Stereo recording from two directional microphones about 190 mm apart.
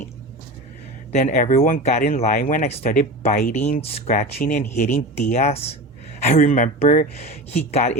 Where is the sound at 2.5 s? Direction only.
35° left (ahead or behind).